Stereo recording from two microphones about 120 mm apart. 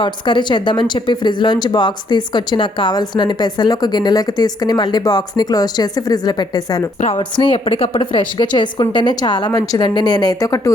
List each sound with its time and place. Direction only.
0.0 s speech: 40° left (ahead or behind)